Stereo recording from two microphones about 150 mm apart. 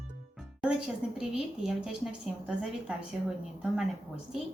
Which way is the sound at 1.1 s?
5° right (ahead or behind).